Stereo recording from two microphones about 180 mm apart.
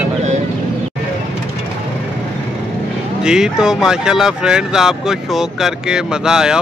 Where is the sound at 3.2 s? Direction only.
5° right (ahead or behind).